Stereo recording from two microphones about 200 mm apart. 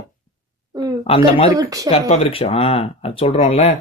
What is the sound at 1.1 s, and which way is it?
Speech, 30° left (ahead or behind).